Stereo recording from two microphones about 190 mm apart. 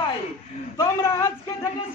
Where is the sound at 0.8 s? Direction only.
15° left (ahead or behind).